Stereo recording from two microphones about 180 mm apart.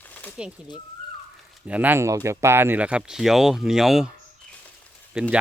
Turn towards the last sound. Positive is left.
turn(degrees=0)  # may be behind; listen again after turning